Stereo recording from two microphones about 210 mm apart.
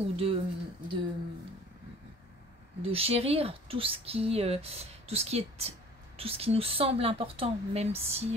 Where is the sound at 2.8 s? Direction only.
30° right (ahead or behind).